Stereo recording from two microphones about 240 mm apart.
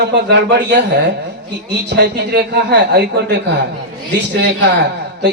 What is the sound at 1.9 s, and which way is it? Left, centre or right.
A man's voice, right.